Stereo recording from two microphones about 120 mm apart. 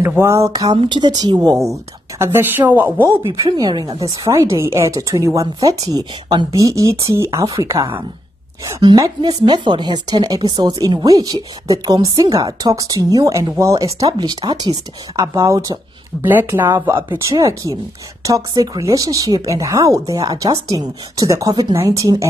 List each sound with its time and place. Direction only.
0.2 s speech: 25° right (ahead or behind)
0.7 s speech: 40° right (ahead or behind); by 3.1 s 15° right (ahead or behind)
3.3 s speech: 30° right (ahead or behind)
16.3 s speech: 15° right (ahead or behind)